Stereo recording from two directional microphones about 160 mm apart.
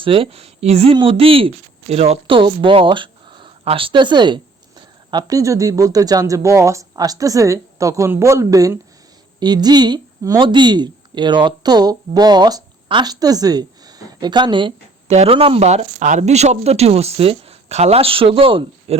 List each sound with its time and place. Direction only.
0.0 s speech: 35° right (ahead or behind)